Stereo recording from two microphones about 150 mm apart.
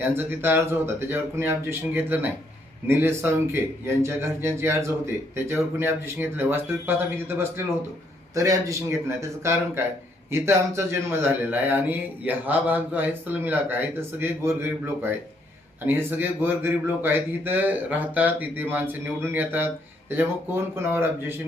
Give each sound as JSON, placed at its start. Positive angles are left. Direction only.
{"t": 0.0, "sound": "a man's voice", "side_deg": -15}